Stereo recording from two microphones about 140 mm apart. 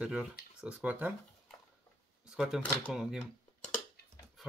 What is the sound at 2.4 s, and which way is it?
Speech, 5° right (ahead or behind).